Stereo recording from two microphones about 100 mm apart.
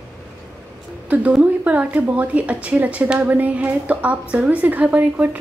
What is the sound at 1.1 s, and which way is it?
A woman's voice, 10° right (ahead or behind).